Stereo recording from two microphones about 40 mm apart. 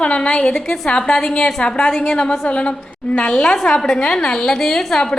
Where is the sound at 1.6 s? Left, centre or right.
Left; by 5.1 s centre.